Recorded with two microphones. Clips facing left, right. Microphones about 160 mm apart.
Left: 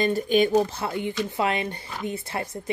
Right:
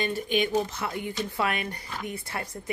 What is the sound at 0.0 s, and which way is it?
Speech, 40° left (ahead or behind).